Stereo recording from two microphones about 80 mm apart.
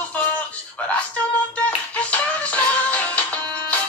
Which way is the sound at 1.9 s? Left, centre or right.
Centre.